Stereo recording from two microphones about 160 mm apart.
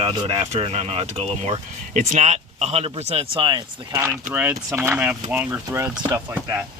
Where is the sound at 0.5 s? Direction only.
45° right (ahead or behind).